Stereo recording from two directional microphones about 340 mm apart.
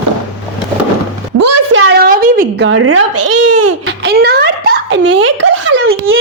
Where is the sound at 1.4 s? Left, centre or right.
Right.